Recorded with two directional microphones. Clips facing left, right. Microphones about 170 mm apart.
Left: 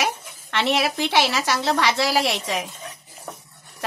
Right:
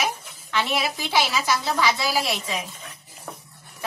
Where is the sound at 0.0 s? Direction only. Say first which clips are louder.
Left 2 dB; 70° left (ahead or behind).